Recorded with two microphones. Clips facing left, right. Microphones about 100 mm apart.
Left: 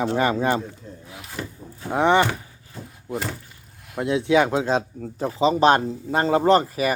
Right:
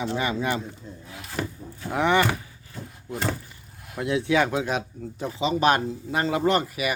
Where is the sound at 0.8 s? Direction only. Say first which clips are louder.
Left 1 dB; 60° left (ahead or behind).